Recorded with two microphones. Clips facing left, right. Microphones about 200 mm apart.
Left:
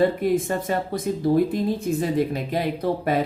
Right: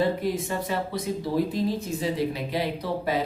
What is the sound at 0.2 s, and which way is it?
A woman's voice, 50° left (ahead or behind).